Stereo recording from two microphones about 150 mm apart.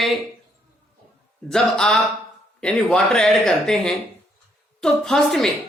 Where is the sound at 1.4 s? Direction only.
5° left (ahead or behind).